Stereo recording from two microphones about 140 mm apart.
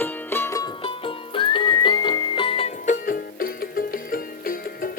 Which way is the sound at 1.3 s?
35° left (ahead or behind).